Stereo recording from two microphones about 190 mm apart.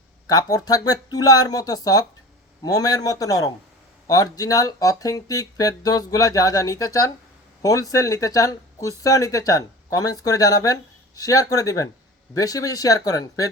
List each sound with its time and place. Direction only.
0.3 s speech: 20° left (ahead or behind)